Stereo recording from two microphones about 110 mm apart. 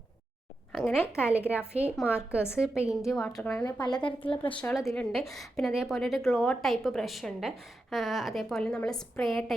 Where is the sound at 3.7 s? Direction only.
40° left (ahead or behind).